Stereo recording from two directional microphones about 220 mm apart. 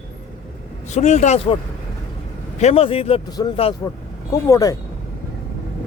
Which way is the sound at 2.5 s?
30° left (ahead or behind).